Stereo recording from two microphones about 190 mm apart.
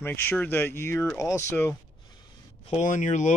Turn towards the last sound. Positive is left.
turn(degrees=40)  # may be behind; listen again after turning